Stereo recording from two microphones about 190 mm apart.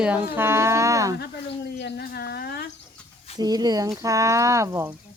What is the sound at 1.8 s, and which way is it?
Speech, 60° left (ahead or behind).